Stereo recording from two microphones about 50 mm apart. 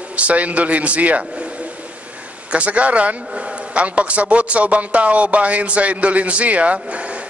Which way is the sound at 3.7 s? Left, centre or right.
Right.